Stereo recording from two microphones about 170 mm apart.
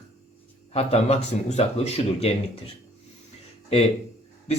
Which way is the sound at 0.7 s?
35° left (ahead or behind).